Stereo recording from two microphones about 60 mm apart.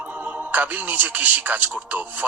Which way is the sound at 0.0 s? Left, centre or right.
Right.